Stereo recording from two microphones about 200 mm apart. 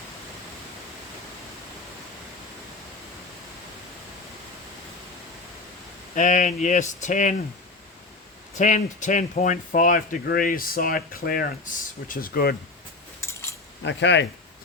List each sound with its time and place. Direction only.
6.1 s speech: 40° left (ahead or behind)
8.5 s speech: 40° left (ahead or behind)
13.8 s speech: 60° left (ahead or behind)